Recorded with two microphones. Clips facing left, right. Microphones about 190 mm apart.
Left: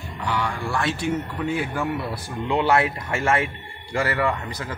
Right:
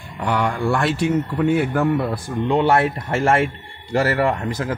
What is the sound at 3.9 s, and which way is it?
Speech, 40° right (ahead or behind).